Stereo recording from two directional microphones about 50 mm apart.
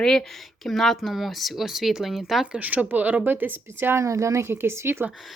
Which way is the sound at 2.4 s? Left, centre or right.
Right.